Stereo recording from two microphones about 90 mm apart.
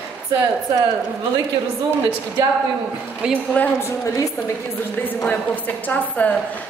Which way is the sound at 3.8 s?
35° left (ahead or behind).